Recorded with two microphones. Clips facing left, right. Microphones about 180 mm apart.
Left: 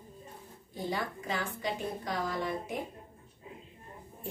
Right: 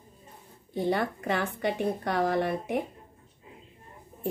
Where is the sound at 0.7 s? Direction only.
60° right (ahead or behind).